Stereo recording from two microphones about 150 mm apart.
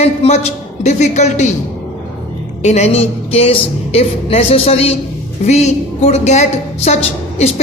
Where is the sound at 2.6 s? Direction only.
50° left (ahead or behind).